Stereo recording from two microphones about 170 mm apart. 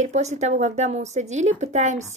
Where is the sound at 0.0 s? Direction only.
40° right (ahead or behind).